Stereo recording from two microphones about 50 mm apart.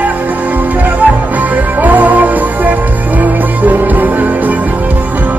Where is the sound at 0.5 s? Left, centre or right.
Right.